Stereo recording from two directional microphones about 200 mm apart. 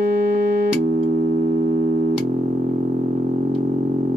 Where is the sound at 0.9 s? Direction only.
40° right (ahead or behind).